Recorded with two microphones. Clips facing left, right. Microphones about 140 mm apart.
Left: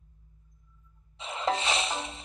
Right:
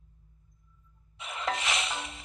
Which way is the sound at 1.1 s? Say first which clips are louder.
Left 4 dB; 30° left (ahead or behind).